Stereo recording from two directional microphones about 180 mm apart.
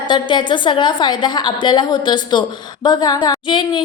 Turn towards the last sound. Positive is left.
turn(degrees=25)  # may be behind; listen again after turning